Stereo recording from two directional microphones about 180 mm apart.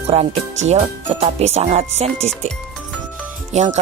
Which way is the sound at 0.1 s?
35° right (ahead or behind).